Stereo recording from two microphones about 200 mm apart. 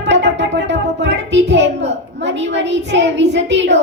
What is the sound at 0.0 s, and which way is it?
Music, 60° right (ahead or behind).